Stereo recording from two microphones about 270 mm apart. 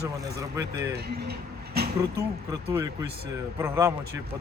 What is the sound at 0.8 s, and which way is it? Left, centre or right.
Speech, right.